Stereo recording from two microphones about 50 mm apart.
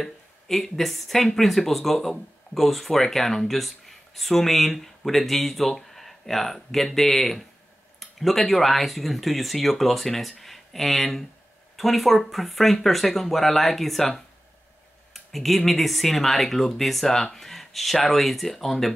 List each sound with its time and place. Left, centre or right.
0.0 s speech: centre
15.1 s speech: centre